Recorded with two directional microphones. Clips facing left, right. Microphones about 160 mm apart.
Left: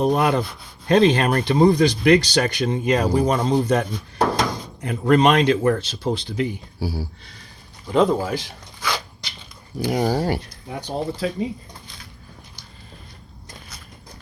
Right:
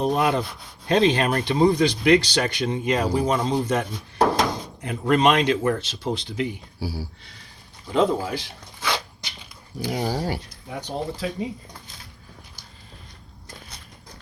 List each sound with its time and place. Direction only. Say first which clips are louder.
0.0 s speech: left 3 dB; 45° left (ahead or behind)
8.8 s dog: even; 25° right (ahead or behind)
9.8 s speech: left 5 dB; 55° left (ahead or behind)
10.8 s speech: left 3 dB; 30° left (ahead or behind)